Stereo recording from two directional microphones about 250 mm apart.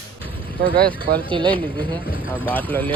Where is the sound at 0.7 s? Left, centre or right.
Right.